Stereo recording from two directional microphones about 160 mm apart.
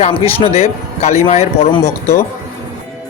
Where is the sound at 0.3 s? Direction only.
35° left (ahead or behind).